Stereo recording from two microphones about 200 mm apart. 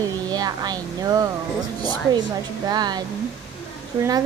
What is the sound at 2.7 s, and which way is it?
Speech, 20° right (ahead or behind).